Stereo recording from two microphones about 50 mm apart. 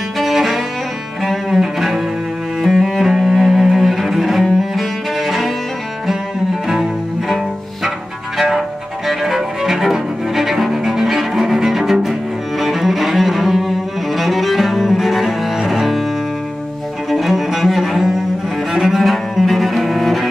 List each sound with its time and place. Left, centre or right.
0.2 s cello: centre
6.7 s cello: centre
8.4 s music: centre
17.1 s cello: centre